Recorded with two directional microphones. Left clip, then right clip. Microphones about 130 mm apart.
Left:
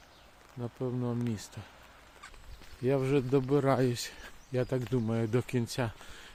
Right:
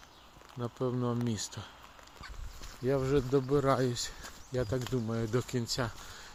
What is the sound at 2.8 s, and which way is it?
Speech, 50° left (ahead or behind).